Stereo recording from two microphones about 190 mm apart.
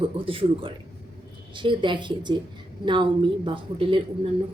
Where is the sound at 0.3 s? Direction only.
30° right (ahead or behind).